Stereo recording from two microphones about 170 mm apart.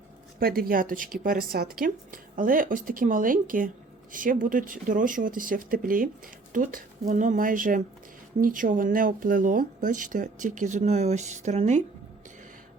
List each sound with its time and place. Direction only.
0.3 s a woman's voice: 60° right (ahead or behind); by 11.8 s 45° right (ahead or behind)